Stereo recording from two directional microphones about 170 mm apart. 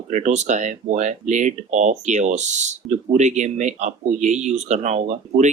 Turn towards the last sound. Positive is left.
turn(degrees=-45)  # may be behind; listen again after turning